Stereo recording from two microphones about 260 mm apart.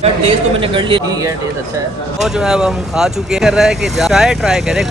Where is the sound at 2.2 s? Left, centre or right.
Centre.